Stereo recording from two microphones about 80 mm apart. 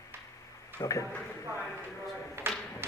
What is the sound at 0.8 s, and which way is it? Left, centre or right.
Speech, left.